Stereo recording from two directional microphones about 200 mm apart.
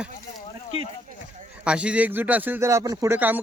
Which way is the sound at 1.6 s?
5° right (ahead or behind).